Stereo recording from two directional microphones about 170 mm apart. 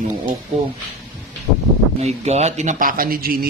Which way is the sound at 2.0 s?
40° right (ahead or behind).